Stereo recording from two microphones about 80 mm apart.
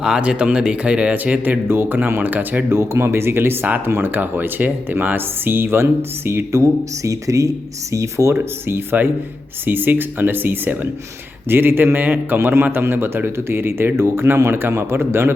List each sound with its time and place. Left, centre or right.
0.0 s a man's voice: centre; by 15.3 s right